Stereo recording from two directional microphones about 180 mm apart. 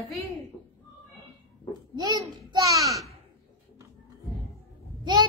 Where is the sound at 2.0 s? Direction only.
25° right (ahead or behind).